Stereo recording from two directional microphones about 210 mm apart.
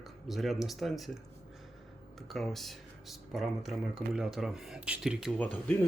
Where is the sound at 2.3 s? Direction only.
Centre (ahead or behind).